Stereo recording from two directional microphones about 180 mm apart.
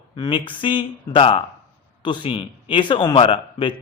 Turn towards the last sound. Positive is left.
turn(degrees=30)  # may be behind; listen again after turning